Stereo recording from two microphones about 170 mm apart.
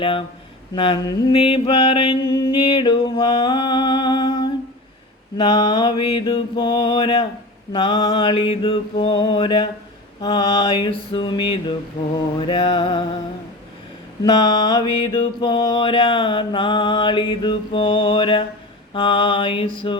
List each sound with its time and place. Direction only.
0.0 s mantra: 30° left (ahead or behind)
14.3 s mantra: 25° left (ahead or behind)